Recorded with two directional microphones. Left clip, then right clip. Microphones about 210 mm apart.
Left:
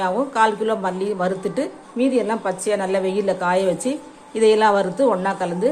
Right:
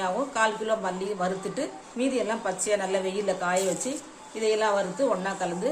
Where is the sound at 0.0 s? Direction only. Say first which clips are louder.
Left 7 dB; 25° left (ahead or behind).